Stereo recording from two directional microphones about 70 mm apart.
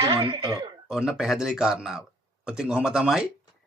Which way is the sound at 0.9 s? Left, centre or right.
Centre.